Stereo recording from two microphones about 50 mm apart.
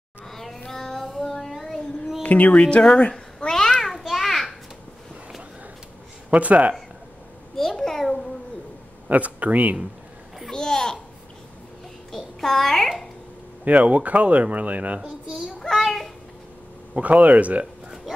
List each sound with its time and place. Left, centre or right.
0.3 s child singing: centre
2.2 s speech: left
2.6 s speech: centre
3.0 s cat: centre
4.0 s a sound: centre
6.3 s speech: right
7.5 s babbling: centre
9.1 s speech: right
10.5 s babbling: centre
12.1 s a sound: centre
13.7 s speech: right
15.0 s a sound: centre
15.6 s a sound: centre
16.9 s speech: right